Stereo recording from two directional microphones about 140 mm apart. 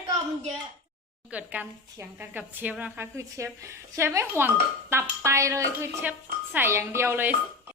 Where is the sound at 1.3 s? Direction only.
10° right (ahead or behind).